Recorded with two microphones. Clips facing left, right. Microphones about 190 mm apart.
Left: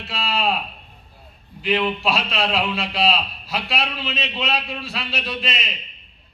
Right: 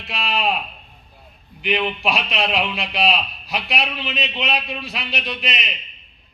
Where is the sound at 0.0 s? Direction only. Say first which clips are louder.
Even; 15° right (ahead or behind).